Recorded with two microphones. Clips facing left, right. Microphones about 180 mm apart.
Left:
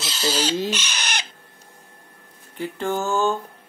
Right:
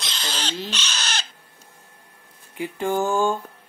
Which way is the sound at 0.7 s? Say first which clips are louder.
Left 2 dB; 10° left (ahead or behind).